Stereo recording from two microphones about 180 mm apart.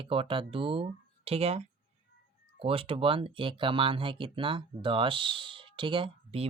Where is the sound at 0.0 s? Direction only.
30° right (ahead or behind).